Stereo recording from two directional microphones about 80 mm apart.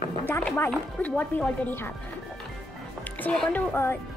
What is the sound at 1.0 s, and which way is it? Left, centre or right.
Speech, centre.